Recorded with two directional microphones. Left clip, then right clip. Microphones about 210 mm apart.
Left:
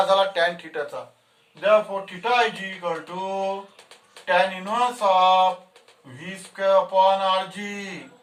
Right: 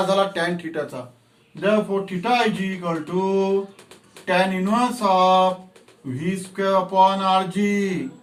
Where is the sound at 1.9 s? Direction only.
15° left (ahead or behind).